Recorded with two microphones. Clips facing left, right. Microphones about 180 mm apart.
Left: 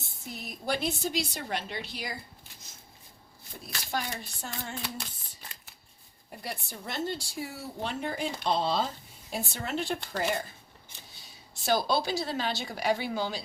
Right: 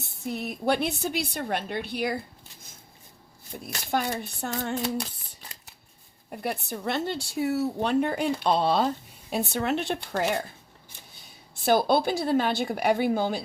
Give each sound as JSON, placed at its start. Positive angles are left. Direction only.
{"t": 0.0, "sound": "speech", "side_deg": -65}
{"t": 3.9, "sound": "speech", "side_deg": -55}
{"t": 6.3, "sound": "speech", "side_deg": -60}
{"t": 11.6, "sound": "speech", "side_deg": -55}